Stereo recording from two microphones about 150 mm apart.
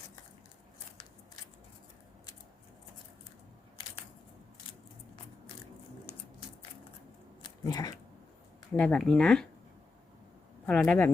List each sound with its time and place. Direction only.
7.4 s dog: 25° left (ahead or behind)
8.7 s speech: 10° left (ahead or behind)
10.7 s speech: 10° left (ahead or behind)